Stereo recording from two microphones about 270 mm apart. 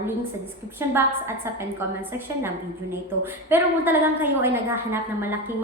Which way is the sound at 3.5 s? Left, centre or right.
Centre.